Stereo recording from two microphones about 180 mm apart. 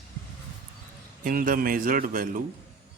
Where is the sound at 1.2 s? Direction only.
50° right (ahead or behind).